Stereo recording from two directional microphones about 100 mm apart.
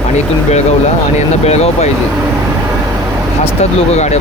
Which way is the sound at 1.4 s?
90° left.